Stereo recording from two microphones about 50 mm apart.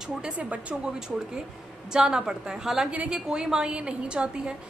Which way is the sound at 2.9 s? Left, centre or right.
Right.